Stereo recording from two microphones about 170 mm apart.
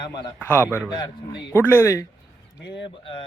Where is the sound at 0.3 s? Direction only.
10° left (ahead or behind).